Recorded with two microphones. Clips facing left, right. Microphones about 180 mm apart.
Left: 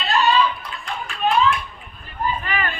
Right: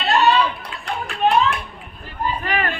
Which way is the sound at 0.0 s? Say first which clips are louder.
Right 2 dB; 65° right (ahead or behind).